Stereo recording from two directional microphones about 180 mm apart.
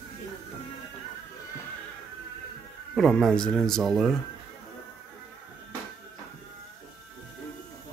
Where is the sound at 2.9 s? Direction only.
Centre (ahead or behind).